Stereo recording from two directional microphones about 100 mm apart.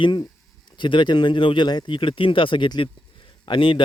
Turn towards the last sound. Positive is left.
turn(degrees=55)  # may be behind; listen again after turning